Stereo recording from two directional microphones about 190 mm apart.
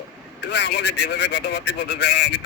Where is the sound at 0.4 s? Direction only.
65° left (ahead or behind).